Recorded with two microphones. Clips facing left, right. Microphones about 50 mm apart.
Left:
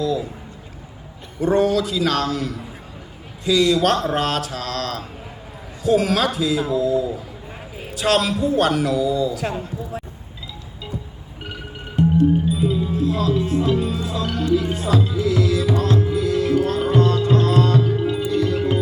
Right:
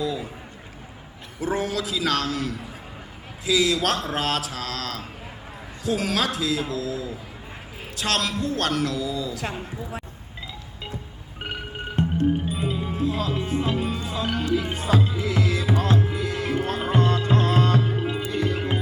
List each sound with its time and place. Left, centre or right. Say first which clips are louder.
0.0 s a sound: left 5 dB; centre
1.4 s a man's voice: left 8 dB; centre
11.9 s music: left 6 dB; right
13.1 s music: left 5 dB; centre
13.9 s music: left 5 dB; centre
14.2 s music: left 4 dB; centre